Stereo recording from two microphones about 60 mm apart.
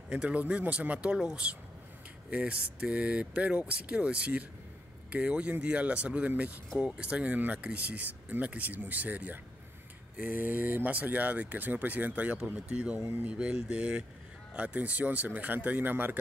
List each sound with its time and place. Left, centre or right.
0.1 s speech: right